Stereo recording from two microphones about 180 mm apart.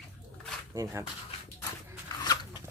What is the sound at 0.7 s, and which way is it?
Speech, 15° right (ahead or behind).